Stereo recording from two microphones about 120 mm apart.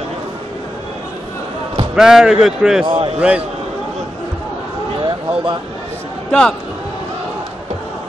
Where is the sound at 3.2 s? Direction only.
10° right (ahead or behind).